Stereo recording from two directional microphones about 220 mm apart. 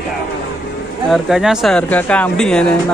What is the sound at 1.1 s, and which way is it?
Speech, centre (ahead or behind).